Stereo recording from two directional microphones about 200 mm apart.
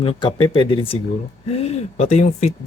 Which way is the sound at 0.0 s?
25° left (ahead or behind).